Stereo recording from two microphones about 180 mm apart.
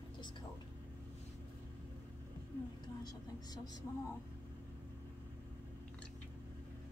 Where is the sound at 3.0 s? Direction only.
20° left (ahead or behind).